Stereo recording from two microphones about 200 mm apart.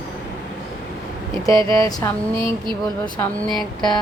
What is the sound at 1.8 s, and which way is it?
Speech, 20° left (ahead or behind).